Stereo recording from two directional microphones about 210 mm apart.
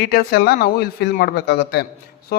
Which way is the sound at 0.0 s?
45° left (ahead or behind).